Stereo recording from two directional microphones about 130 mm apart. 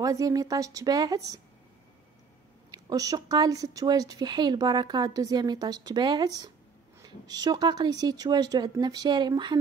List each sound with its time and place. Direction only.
0.0 s a woman's voice: 25° right (ahead or behind)
2.7 s speech: 30° right (ahead or behind)